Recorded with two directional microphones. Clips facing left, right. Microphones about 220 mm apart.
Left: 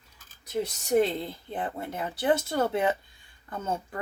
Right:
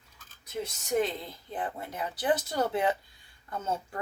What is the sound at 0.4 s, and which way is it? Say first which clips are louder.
Speech: left 5 dB; 35° left (ahead or behind).